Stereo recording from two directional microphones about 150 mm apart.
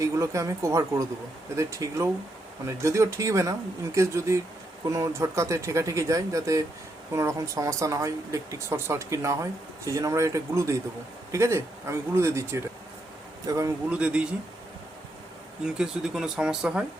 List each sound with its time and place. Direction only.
0.0 s speech: 20° right (ahead or behind)
13.9 s speech: 10° right (ahead or behind)
15.6 s speech: 5° right (ahead or behind)